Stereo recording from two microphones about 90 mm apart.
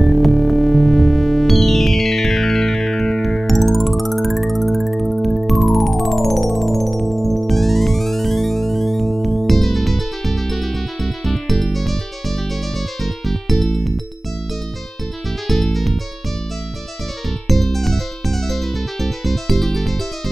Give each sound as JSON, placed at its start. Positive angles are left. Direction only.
{"t": 0.0, "sound": "music", "side_deg": 0}
{"t": 15.4, "sound": "music", "side_deg": 0}
{"t": 17.5, "sound": "music", "side_deg": 0}